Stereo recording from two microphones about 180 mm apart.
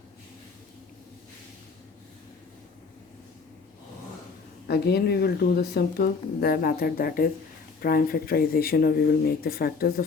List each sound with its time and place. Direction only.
4.7 s speech: 65° left (ahead or behind)